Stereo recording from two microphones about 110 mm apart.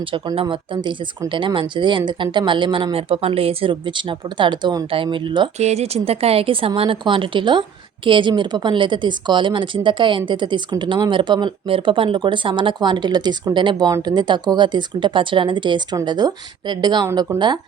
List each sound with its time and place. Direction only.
0.4 s speech: 45° right (ahead or behind)
5.5 s a woman's voice: 80° right; by 17.6 s 40° right (ahead or behind)